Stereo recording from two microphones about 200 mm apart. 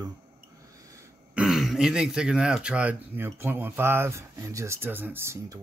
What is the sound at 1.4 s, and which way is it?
Speech, centre (ahead or behind).